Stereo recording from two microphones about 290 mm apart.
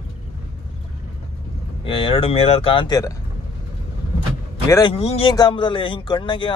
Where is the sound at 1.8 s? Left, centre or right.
Centre.